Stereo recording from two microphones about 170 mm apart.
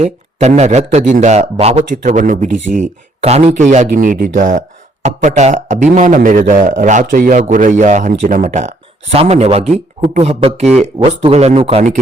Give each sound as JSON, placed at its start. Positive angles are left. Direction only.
{"t": 0.0, "sound": "a man's voice", "side_deg": -40}
{"t": 2.7, "sound": "a man's voice", "side_deg": -40}
{"t": 3.9, "sound": "speech", "side_deg": -60}
{"t": 5.0, "sound": "a man's voice", "side_deg": -45}